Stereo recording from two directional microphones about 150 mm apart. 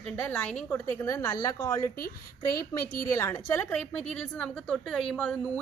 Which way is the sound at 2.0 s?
90° left.